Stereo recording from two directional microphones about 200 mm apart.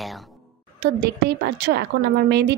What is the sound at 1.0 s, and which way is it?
A woman's voice, 55° right (ahead or behind).